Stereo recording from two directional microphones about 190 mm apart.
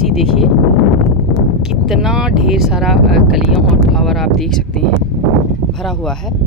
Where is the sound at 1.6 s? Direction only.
Centre (ahead or behind).